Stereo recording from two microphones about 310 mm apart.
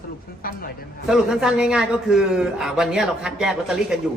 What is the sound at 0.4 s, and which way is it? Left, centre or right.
Speech, left.